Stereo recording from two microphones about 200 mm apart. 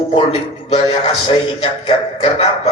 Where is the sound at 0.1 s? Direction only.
30° left (ahead or behind).